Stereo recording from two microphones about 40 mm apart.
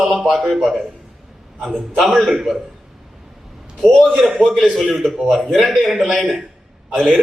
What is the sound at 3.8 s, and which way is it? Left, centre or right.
Speech, centre.